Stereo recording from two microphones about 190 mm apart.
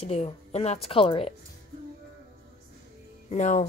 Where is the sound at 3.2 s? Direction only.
40° left (ahead or behind).